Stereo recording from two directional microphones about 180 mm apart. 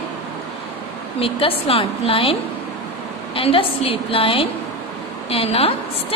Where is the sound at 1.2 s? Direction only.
30° left (ahead or behind).